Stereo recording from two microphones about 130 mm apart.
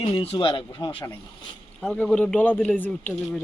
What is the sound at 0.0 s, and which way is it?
Speech, 45° left (ahead or behind).